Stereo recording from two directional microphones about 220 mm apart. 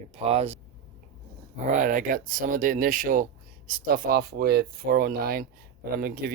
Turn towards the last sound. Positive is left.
turn(degrees=-40)  # may be behind; listen again after turning